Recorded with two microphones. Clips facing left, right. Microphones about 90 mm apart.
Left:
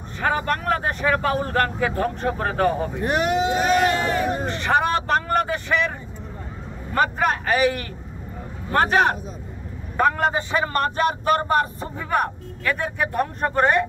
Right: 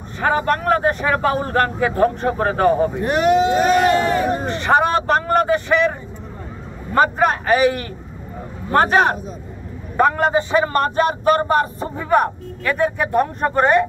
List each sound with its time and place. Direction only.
0.2 s a man's voice: 30° right (ahead or behind)
3.0 s speech: 10° left (ahead or behind)
3.6 s speech: centre (ahead or behind)
4.5 s a man's voice: 25° right (ahead or behind)
8.7 s a man's voice: 25° right (ahead or behind)